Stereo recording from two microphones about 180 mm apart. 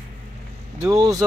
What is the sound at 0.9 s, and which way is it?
Speech, 20° right (ahead or behind).